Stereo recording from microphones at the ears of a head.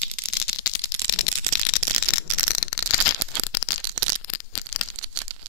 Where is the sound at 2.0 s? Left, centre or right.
Left.